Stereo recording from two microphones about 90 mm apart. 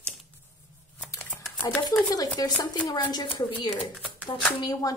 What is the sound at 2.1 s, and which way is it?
Speech, 45° left (ahead or behind).